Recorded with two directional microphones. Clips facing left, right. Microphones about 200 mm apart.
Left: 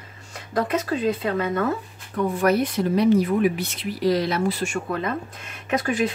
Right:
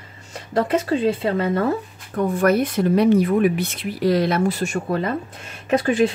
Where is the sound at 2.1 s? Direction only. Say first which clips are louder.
Right 2 dB; 50° right (ahead or behind).